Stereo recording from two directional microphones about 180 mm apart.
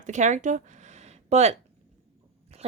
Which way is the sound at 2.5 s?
35° right (ahead or behind).